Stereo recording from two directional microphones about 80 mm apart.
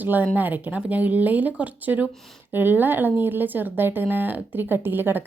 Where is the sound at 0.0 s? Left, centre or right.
Right.